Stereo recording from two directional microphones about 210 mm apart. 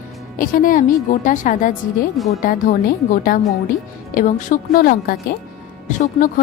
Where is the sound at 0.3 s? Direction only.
40° left (ahead or behind).